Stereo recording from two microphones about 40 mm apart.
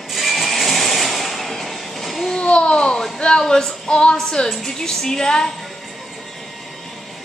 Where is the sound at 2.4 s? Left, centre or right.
Left.